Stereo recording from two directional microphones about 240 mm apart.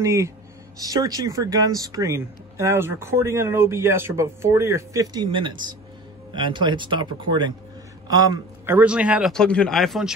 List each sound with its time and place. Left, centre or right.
0.0 s speech: centre
8.6 s speech: centre